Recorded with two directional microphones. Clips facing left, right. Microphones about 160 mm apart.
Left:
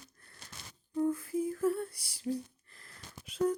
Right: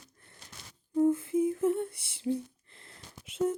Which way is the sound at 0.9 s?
25° right (ahead or behind).